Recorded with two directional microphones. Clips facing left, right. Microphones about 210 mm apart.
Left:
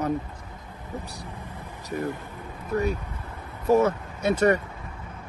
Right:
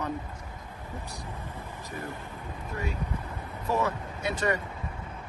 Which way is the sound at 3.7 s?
45° left (ahead or behind).